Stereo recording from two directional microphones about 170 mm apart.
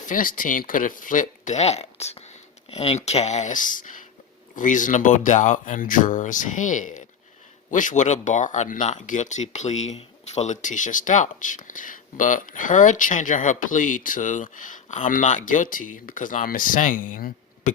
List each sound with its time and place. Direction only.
0.0 s speech: 50° left (ahead or behind)